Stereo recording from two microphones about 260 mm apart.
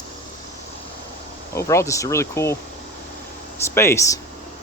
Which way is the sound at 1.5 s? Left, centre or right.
Centre.